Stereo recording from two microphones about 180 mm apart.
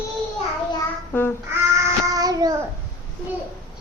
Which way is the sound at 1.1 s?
10° left (ahead or behind).